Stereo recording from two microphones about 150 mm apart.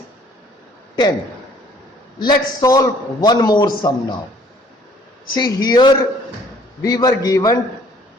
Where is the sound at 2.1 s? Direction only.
30° left (ahead or behind).